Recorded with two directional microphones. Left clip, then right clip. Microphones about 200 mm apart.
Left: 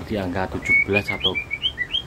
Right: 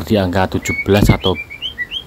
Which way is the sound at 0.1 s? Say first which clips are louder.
Right 10 dB; 40° right (ahead or behind).